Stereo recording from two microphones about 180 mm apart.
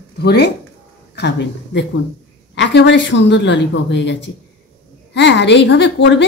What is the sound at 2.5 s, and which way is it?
A woman's voice, 85° left.